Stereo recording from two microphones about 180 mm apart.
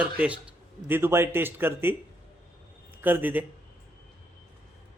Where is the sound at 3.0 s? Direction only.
10° right (ahead or behind).